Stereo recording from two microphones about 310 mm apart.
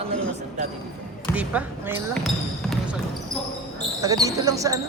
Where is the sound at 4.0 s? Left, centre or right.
Centre.